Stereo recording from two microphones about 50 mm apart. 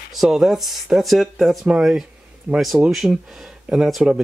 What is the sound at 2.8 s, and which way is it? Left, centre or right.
Speech, right.